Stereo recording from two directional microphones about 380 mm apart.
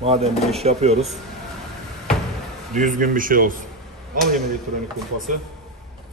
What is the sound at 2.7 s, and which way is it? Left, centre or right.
Speech, centre.